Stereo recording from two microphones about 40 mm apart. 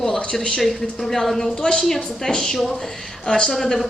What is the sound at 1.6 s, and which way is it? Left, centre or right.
Speech, left.